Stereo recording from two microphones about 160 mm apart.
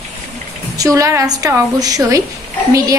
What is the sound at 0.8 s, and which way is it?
A woman's voice, 20° right (ahead or behind).